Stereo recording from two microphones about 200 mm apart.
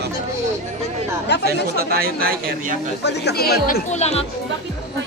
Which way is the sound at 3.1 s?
55° left (ahead or behind).